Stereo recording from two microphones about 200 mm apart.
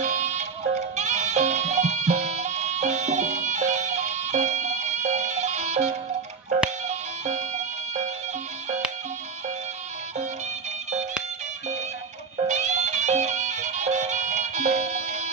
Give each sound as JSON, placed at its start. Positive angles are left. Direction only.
{"t": 0.0, "sound": "music", "side_deg": -35}
{"t": 12.4, "sound": "music", "side_deg": -35}